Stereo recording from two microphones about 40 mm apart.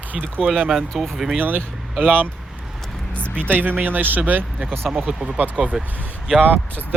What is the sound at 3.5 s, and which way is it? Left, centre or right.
Speech, right.